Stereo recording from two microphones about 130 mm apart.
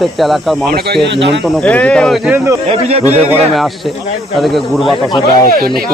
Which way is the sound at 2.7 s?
50° right (ahead or behind).